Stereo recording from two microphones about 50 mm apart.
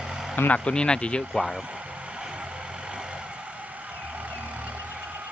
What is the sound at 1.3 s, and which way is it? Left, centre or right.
Speech, centre.